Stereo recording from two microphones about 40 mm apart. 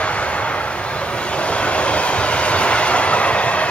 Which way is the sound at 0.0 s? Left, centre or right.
Left.